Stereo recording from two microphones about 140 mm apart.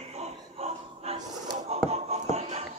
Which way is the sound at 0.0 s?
50° right (ahead or behind).